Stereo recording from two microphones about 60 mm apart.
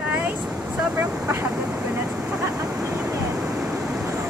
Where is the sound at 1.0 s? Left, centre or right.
Right.